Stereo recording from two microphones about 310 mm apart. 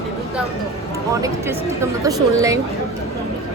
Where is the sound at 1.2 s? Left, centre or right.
Centre.